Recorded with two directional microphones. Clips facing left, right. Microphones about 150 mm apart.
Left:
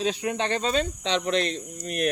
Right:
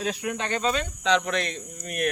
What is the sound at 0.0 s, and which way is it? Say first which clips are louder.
Speech: left 3 dB; 30° left (ahead or behind).